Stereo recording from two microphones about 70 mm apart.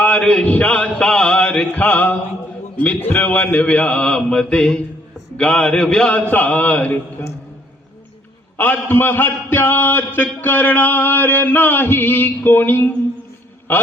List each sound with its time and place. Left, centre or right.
0.0 s a sound: left
0.4 s mantra: left
2.7 s a man's voice: left
8.5 s a man's voice: left
13.7 s mantra: left